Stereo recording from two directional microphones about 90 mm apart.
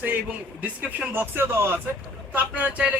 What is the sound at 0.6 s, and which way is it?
Speech, 15° right (ahead or behind).